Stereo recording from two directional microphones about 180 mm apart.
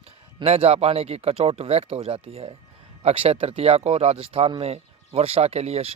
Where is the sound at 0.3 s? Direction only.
35° right (ahead or behind).